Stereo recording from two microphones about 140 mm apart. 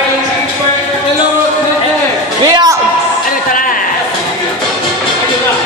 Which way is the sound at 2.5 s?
30° right (ahead or behind).